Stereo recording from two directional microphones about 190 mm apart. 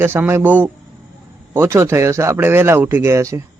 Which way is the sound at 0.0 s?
10° right (ahead or behind).